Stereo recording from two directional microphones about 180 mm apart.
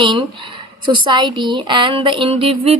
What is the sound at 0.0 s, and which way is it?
Speech, 25° right (ahead or behind).